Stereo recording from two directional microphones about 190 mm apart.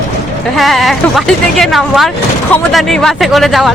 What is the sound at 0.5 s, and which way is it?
A woman's voice, centre (ahead or behind).